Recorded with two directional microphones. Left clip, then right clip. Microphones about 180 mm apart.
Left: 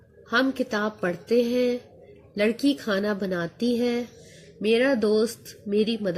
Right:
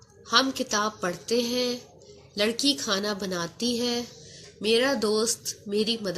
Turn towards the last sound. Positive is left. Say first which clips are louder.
# left 2 dB
turn(degrees=45)  # may be behind; listen again after turning